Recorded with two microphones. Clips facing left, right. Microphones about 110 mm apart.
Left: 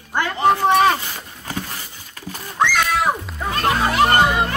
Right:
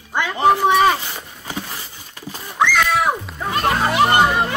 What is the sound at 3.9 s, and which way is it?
Speech, 10° right (ahead or behind).